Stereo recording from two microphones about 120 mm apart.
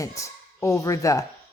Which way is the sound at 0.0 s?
25° left (ahead or behind).